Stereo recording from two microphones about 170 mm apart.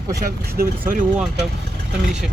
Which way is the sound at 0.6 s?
50° right (ahead or behind).